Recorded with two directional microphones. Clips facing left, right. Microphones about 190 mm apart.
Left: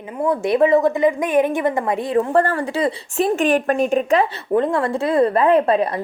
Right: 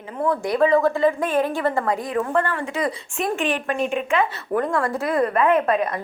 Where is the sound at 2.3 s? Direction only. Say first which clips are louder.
Left 5 dB; 40° left (ahead or behind).